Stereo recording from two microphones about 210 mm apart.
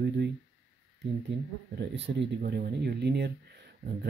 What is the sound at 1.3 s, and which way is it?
Speech, 55° right (ahead or behind).